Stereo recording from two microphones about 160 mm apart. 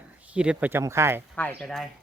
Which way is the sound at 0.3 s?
10° right (ahead or behind).